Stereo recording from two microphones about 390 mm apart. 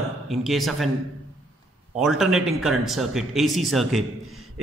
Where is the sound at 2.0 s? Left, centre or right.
Centre.